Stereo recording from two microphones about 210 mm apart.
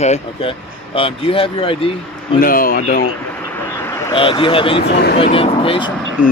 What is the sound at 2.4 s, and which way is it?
Speech, 45° left (ahead or behind).